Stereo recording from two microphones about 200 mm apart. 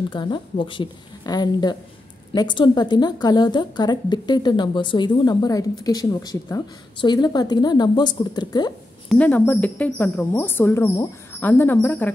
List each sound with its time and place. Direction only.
0.1 s a woman's voice: 25° left (ahead or behind)
9.1 s a woman's voice: 5° left (ahead or behind)